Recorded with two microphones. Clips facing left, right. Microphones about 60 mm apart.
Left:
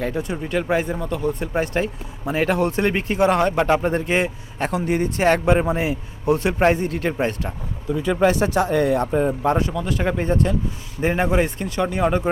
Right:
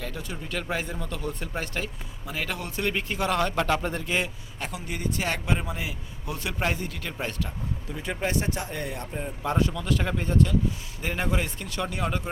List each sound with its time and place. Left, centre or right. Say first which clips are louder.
0.0 s speech: left 11 dB; left
8.2 s speech: left 10 dB; left
9.4 s speech: left 6 dB; left
10.2 s speech: left 3 dB; left